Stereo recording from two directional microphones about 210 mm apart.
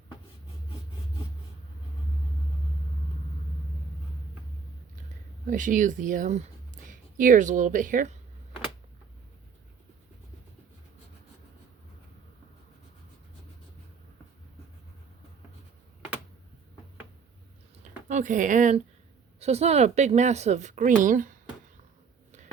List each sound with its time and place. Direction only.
5.5 s speech: 40° right (ahead or behind)
18.1 s speech: 35° right (ahead or behind)